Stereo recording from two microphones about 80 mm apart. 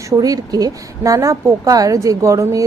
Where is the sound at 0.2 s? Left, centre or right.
Right.